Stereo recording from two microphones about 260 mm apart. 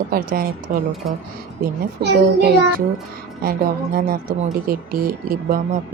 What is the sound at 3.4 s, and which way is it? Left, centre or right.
Speech, right.